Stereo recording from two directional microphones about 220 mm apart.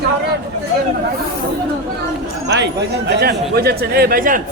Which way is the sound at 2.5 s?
50° right (ahead or behind).